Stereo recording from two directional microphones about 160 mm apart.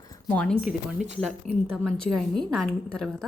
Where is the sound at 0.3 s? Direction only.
5° left (ahead or behind).